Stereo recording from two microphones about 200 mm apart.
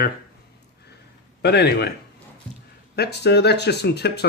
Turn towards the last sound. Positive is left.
turn(degrees=55)  # may be behind; listen again after turning